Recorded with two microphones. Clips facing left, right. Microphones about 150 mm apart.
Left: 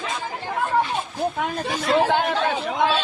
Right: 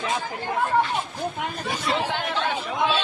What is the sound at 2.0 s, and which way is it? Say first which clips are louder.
Speech: left 6 dB; 45° left (ahead or behind).